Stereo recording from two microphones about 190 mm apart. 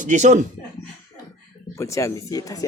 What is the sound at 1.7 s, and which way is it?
Speech, 15° left (ahead or behind).